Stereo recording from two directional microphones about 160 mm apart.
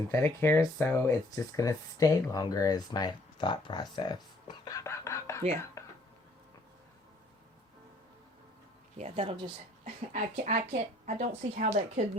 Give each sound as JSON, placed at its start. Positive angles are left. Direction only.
{"t": 0.1, "sound": "speech", "side_deg": 15}
{"t": 5.8, "sound": "a sound", "side_deg": 20}
{"t": 9.0, "sound": "speech", "side_deg": -40}
{"t": 10.1, "sound": "speech", "side_deg": -50}